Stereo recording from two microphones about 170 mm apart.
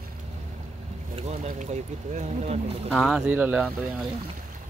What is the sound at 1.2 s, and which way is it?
Speech, 45° right (ahead or behind).